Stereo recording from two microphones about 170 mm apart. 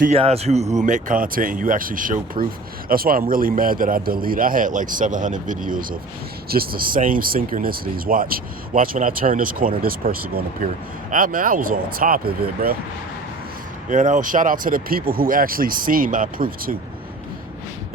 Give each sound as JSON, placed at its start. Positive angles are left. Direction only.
{"t": 0.1, "sound": "speech", "side_deg": -35}
{"t": 13.9, "sound": "speech", "side_deg": -45}